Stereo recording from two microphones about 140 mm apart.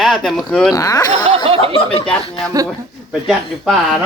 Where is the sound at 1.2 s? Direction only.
45° right (ahead or behind).